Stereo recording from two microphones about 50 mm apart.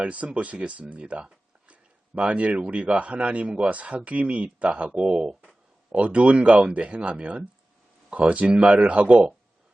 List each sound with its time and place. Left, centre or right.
0.0 s speech: right